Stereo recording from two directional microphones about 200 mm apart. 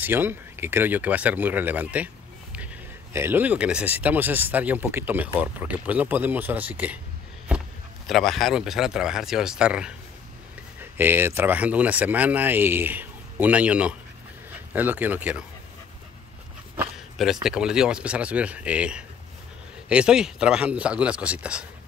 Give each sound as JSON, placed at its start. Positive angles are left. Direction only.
{"t": 0.0, "sound": "speech", "side_deg": -10}
{"t": 8.1, "sound": "speech", "side_deg": 0}
{"t": 16.7, "sound": "speech", "side_deg": -5}